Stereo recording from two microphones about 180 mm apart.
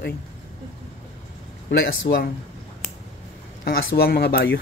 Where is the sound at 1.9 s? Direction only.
65° left (ahead or behind).